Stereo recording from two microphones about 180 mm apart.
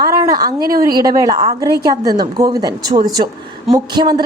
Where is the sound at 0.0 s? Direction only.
20° right (ahead or behind).